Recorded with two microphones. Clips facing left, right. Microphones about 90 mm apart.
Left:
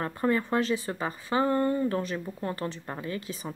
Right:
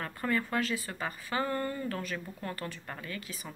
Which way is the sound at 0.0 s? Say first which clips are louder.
Left 5 dB; 25° left (ahead or behind).